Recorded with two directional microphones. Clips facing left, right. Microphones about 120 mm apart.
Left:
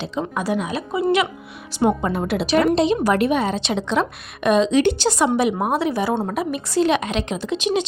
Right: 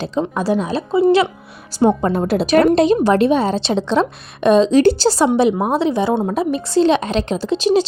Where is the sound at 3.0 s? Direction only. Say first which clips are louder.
Right 4 dB; 30° right (ahead or behind).